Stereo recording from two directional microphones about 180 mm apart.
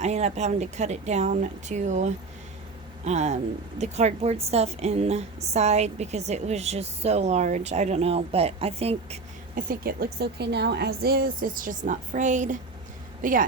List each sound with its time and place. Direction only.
0.0 s a woman's voice: 40° right (ahead or behind)
9.6 s a woman's voice: 55° right (ahead or behind)